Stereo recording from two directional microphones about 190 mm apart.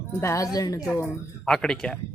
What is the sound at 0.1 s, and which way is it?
Speech, 15° left (ahead or behind).